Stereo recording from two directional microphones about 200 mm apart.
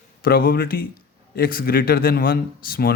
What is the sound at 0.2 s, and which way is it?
Speech, 50° left (ahead or behind).